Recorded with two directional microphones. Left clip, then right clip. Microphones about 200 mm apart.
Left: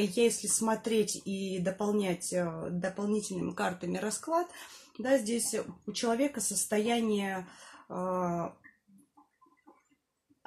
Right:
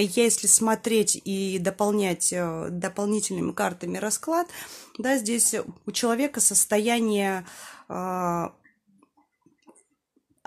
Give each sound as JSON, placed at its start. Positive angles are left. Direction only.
{"t": 0.0, "sound": "speech", "side_deg": -45}